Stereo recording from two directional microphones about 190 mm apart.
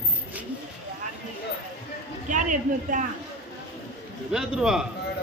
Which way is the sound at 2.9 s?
45° right (ahead or behind).